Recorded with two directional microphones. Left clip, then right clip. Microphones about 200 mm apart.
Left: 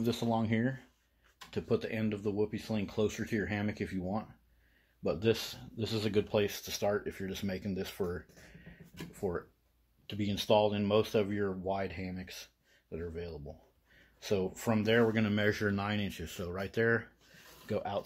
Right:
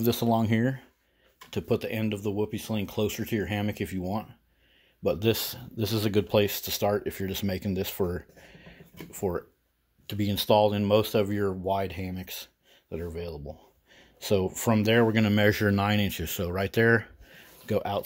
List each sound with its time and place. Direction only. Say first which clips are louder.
0.0 s speech: right 7 dB; 40° right (ahead or behind)